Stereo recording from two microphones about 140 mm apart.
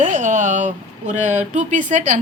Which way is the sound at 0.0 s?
65° right (ahead or behind).